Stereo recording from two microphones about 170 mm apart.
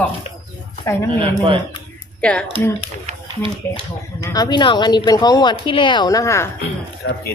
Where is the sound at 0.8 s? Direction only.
15° left (ahead or behind).